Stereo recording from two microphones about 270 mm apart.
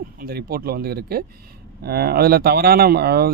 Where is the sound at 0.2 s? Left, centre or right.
Right.